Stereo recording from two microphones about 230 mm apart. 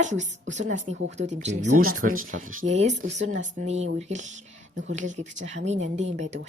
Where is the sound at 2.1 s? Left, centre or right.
Right.